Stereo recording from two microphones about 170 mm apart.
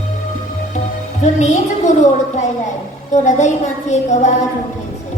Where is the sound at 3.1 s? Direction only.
45° left (ahead or behind).